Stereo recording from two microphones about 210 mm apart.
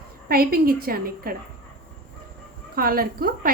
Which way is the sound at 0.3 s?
45° right (ahead or behind).